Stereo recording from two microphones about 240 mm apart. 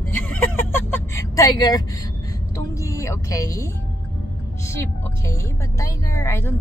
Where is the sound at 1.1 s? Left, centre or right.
Centre.